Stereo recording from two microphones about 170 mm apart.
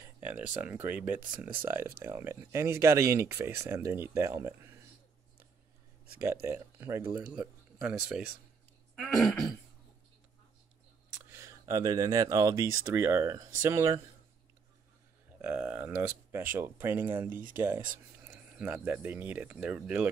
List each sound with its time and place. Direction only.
0.0 s speech: 10° right (ahead or behind)
6.2 s speech: 15° right (ahead or behind)
8.9 s throat clearing: centre (ahead or behind)
11.2 s speech: 15° right (ahead or behind)
15.4 s a sound: 10° right (ahead or behind)
16.5 s speech: 15° right (ahead or behind)
17.3 s speech: 55° right (ahead or behind)
17.6 s speech: 10° right (ahead or behind)